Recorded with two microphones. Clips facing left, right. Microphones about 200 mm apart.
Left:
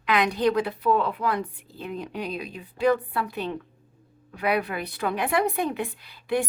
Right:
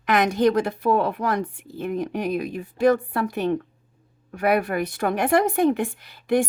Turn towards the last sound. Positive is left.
turn(degrees=-45)  # may be behind; listen again after turning